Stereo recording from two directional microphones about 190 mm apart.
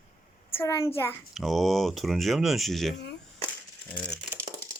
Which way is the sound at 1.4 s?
Centre (ahead or behind).